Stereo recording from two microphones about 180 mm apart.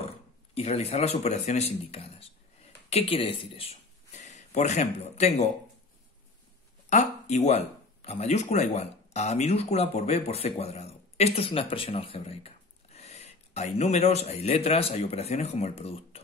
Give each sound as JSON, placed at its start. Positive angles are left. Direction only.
{"t": 0.6, "sound": "speech", "side_deg": 35}
{"t": 6.9, "sound": "speech", "side_deg": 40}